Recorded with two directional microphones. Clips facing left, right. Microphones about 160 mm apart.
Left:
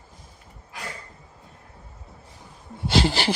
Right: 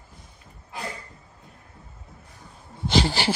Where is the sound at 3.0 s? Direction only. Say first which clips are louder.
Left 4 dB; centre (ahead or behind).